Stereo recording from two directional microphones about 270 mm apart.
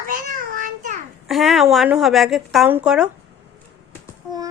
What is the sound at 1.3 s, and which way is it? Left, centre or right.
Speech, centre.